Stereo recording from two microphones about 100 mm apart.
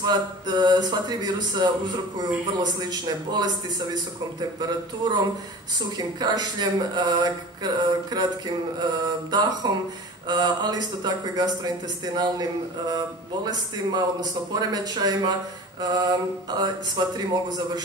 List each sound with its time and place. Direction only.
0.0 s speech: 40° right (ahead or behind)
4.6 s speech: 45° right (ahead or behind)